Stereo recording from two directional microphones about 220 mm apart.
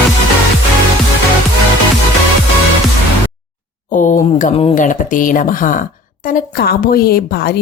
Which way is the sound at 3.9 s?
35° left (ahead or behind).